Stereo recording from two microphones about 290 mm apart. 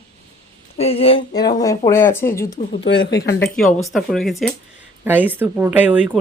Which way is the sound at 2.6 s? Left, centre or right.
Left.